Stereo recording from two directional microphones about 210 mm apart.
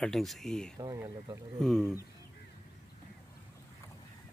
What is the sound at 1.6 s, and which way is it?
Speech, centre (ahead or behind).